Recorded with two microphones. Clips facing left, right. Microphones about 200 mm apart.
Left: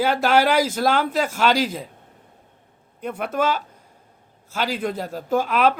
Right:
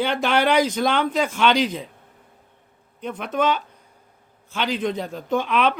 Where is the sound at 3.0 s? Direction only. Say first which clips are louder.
Even; 10° left (ahead or behind).